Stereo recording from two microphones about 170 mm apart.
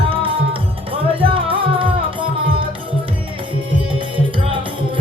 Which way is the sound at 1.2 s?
30° right (ahead or behind).